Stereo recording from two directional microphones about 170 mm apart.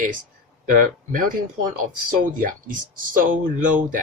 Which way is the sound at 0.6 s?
55° right (ahead or behind).